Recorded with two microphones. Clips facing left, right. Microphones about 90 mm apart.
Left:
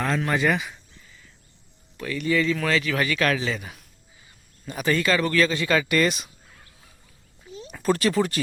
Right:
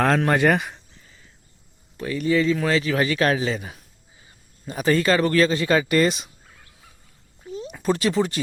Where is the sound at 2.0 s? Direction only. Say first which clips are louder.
Right 3 dB; 25° right (ahead or behind).